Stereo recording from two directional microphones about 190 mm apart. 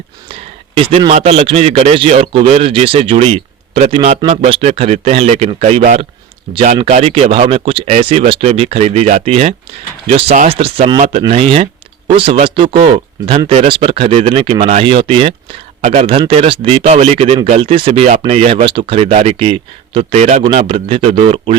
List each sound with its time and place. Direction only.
0.8 s speech: 30° right (ahead or behind)